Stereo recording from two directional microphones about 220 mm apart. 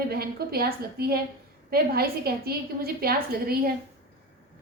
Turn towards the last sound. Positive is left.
turn(degrees=-45)  # may be behind; listen again after turning